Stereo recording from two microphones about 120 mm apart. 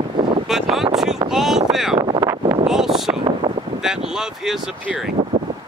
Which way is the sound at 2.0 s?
40° right (ahead or behind).